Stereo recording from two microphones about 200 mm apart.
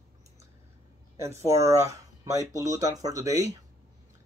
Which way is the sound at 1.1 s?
15° right (ahead or behind).